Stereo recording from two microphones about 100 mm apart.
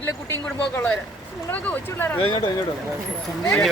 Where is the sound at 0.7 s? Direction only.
20° left (ahead or behind).